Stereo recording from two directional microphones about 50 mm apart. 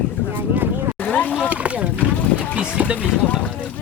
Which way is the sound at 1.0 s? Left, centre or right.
Left.